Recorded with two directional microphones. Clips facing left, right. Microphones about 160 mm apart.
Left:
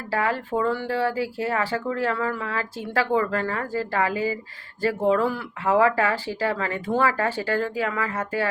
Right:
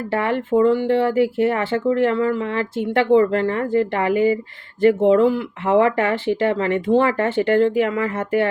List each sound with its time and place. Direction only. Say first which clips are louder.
0.1 s speech: right 5 dB; 25° right (ahead or behind)